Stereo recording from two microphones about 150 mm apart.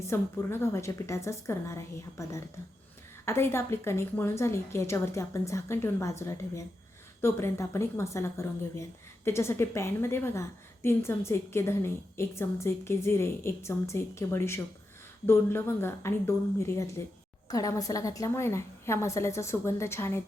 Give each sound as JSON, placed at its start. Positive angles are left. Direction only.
{"t": 0.1, "sound": "a woman's voice", "side_deg": 15}